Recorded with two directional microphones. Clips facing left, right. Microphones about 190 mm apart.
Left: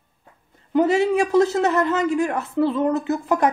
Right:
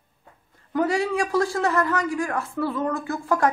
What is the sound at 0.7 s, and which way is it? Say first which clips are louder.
A man's voice: left 5 dB; 20° left (ahead or behind).